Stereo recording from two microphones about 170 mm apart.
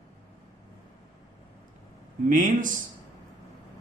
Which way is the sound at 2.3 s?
50° right (ahead or behind).